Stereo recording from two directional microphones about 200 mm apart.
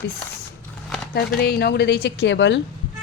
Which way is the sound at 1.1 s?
55° left (ahead or behind).